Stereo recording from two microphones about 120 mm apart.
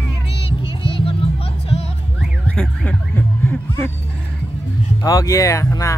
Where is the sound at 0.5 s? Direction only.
45° left (ahead or behind).